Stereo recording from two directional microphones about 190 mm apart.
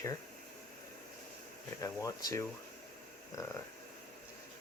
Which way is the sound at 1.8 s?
15° left (ahead or behind).